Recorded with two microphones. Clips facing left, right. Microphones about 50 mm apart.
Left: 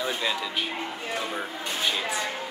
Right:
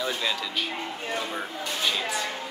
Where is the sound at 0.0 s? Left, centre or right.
Centre.